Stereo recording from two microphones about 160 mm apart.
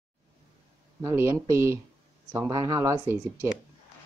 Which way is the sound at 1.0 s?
20° right (ahead or behind).